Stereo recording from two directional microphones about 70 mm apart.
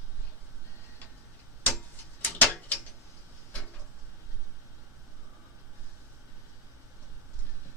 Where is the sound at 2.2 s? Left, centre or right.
Left.